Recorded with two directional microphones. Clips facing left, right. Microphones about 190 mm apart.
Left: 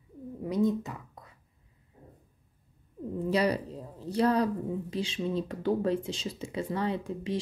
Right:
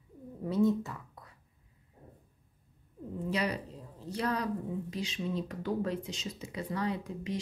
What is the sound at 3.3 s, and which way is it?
Speech, 35° left (ahead or behind).